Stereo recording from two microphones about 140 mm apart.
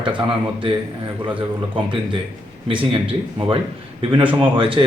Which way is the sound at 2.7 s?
40° right (ahead or behind).